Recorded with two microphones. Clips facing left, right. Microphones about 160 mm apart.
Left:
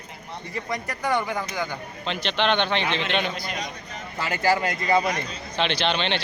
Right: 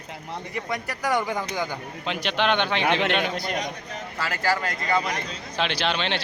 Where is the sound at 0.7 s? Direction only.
5° right (ahead or behind).